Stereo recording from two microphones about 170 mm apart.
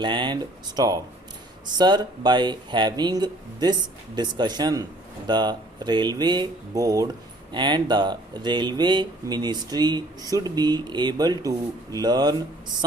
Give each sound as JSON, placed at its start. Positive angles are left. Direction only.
{"t": 0.0, "sound": "speech", "side_deg": -25}